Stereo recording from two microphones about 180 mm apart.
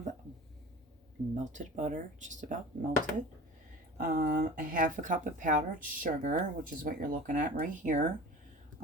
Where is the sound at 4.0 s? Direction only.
50° right (ahead or behind).